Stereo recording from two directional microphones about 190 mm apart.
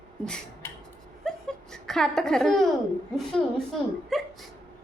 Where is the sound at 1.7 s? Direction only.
Centre (ahead or behind).